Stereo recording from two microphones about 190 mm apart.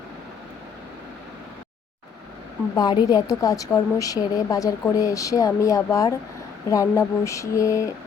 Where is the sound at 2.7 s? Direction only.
20° left (ahead or behind).